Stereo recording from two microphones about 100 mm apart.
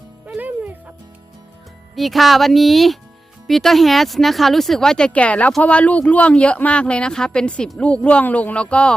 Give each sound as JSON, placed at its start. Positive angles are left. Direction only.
{"t": 0.3, "sound": "music", "side_deg": -15}
{"t": 2.0, "sound": "speech", "side_deg": 0}